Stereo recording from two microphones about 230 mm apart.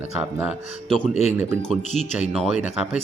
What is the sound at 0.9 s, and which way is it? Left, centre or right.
Speech, left.